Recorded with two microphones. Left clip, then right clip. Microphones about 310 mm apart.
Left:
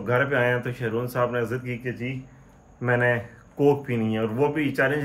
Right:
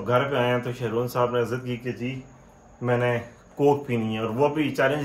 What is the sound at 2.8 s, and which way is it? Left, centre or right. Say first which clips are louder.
Speech: left 2 dB; centre.